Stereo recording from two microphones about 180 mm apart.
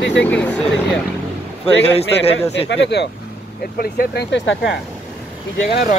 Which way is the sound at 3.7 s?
60° left (ahead or behind).